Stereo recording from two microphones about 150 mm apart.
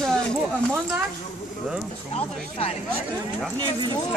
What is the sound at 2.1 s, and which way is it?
Speech, 45° left (ahead or behind).